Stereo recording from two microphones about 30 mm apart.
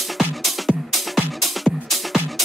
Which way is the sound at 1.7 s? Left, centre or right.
Left.